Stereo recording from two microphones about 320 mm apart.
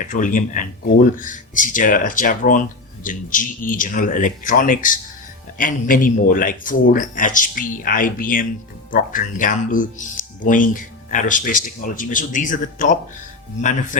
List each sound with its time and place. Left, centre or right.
0.0 s speech: left